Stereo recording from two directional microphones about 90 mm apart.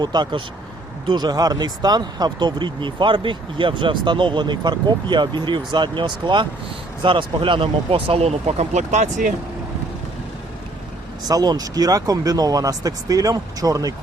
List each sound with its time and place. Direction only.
0.0 s speech: 50° right (ahead or behind); by 8.3 s 85° right
11.2 s speech: 45° right (ahead or behind)